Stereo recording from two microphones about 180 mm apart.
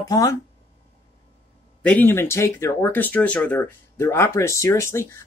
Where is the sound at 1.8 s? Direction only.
10° left (ahead or behind).